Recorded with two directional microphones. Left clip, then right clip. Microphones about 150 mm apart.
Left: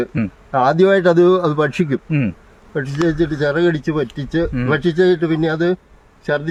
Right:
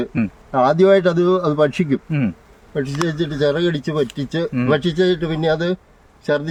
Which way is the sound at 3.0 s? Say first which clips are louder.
Left 2 dB; 15° left (ahead or behind).